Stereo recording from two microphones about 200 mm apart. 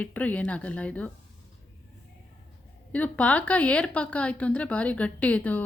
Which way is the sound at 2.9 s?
5° left (ahead or behind).